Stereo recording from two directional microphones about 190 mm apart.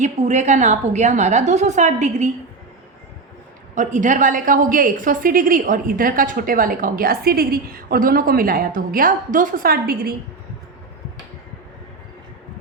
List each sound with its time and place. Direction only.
0.0 s a woman's voice: 40° right (ahead or behind)
3.8 s a woman's voice: 40° right (ahead or behind)